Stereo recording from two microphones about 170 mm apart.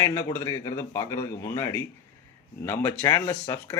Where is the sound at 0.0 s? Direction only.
15° left (ahead or behind).